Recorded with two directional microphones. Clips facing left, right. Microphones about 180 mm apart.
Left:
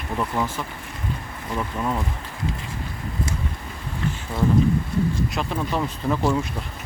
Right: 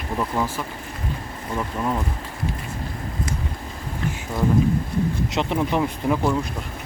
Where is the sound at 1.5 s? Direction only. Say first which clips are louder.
Right 1 dB; 5° right (ahead or behind).